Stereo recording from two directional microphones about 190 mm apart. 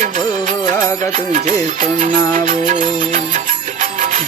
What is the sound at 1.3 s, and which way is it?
Music, 40° right (ahead or behind).